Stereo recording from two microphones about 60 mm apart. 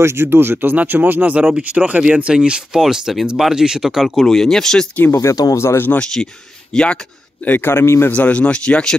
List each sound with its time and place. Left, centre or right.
0.0 s speech: right; by 4.8 s centre
5.1 s speech: left
5.6 s a man's voice: left
5.9 s speech: centre
7.4 s a man's voice: left
7.8 s a man's voice: left
8.1 s speech: left